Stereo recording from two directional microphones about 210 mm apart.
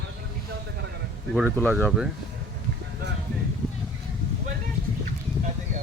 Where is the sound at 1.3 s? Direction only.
5° right (ahead or behind).